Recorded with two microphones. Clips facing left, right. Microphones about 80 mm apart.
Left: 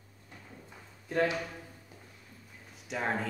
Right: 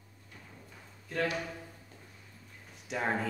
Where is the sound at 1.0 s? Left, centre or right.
Left.